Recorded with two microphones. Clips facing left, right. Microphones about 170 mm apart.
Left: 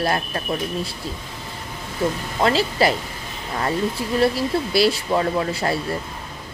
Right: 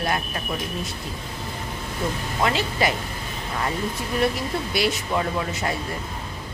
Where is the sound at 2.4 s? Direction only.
35° left (ahead or behind).